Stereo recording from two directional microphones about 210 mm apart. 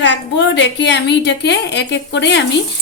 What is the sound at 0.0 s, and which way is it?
A woman's voice, 60° left (ahead or behind).